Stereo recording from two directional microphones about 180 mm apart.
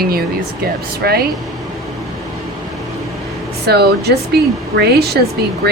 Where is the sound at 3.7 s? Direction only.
65° right (ahead or behind).